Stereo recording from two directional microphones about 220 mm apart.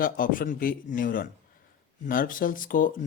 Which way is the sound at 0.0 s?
40° left (ahead or behind).